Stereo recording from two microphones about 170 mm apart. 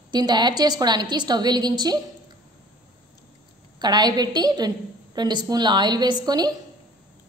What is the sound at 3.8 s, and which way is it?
A woman's voice, 25° right (ahead or behind).